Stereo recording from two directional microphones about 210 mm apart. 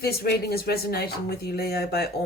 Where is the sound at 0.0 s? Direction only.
50° left (ahead or behind).